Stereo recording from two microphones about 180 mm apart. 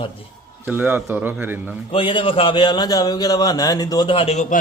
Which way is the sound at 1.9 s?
30° left (ahead or behind).